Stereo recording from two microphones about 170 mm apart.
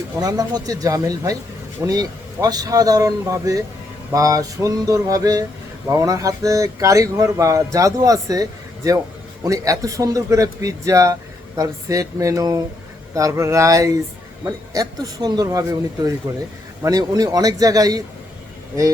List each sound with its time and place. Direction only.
0.2 s a man's voice: 20° right (ahead or behind)